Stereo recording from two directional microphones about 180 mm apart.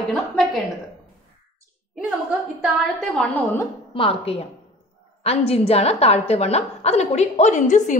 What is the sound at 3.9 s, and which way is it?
A woman's voice, 30° left (ahead or behind).